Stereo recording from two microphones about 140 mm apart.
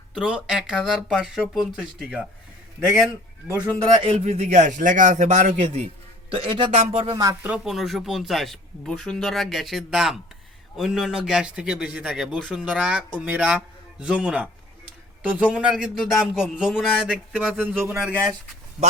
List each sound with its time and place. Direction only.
0.1 s speech: 5° right (ahead or behind)
4.0 s a man's voice: 50° right (ahead or behind); by 7.3 s 30° right (ahead or behind)
7.4 s speech: 5° right (ahead or behind)